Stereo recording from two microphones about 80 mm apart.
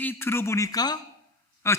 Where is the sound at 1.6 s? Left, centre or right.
Left.